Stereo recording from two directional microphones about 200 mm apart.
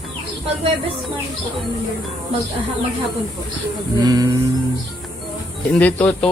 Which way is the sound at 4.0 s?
20° right (ahead or behind).